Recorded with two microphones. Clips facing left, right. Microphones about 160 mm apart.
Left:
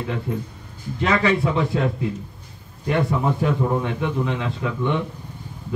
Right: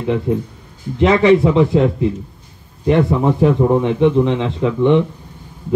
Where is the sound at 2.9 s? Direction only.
25° right (ahead or behind).